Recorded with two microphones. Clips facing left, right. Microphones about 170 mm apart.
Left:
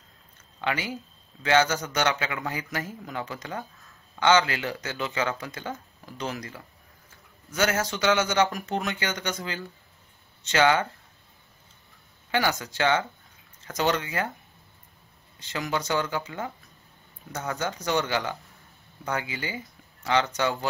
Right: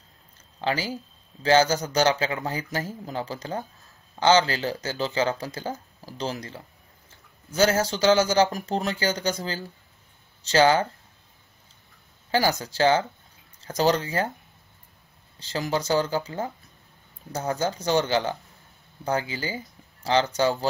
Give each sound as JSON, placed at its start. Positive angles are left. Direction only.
{"t": 0.6, "sound": "speech", "side_deg": -30}
{"t": 12.3, "sound": "speech", "side_deg": -35}
{"t": 15.3, "sound": "speech", "side_deg": -30}